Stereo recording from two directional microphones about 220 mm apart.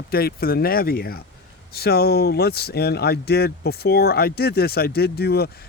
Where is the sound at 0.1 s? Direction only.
45° left (ahead or behind).